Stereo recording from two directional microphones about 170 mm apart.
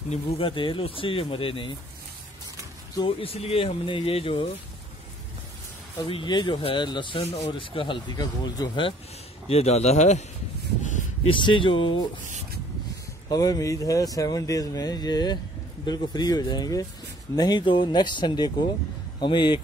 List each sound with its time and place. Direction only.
0.1 s speech: 30° left (ahead or behind)
3.0 s speech: 30° left (ahead or behind)
6.0 s speech: 30° left (ahead or behind)
9.5 s speech: 40° left (ahead or behind)
10.8 s a sound: 45° left (ahead or behind)
11.2 s speech: 30° left (ahead or behind)
13.3 s speech: 20° left (ahead or behind)